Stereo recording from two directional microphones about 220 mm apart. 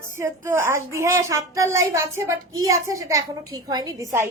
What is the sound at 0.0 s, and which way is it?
A woman's voice, 10° right (ahead or behind).